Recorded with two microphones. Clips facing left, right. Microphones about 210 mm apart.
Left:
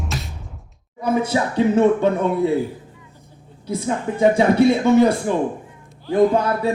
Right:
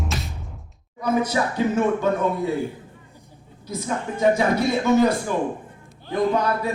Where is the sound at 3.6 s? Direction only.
30° left (ahead or behind).